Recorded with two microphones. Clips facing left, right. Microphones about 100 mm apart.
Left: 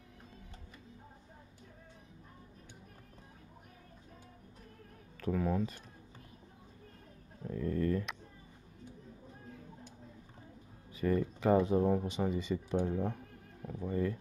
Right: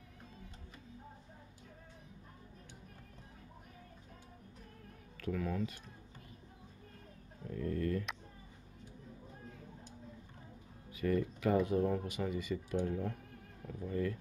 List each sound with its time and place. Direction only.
5.2 s speech: 30° left (ahead or behind)
7.4 s speech: 25° left (ahead or behind)
10.9 s speech: 30° left (ahead or behind)